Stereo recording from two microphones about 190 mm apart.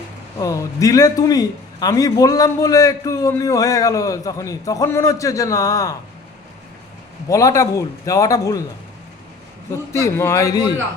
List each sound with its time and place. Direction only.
0.3 s a man's voice: 15° left (ahead or behind)
7.3 s a man's voice: 15° left (ahead or behind)
9.9 s a man's voice: 15° left (ahead or behind)